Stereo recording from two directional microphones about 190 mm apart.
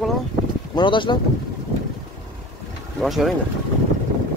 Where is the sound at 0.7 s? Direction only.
25° left (ahead or behind).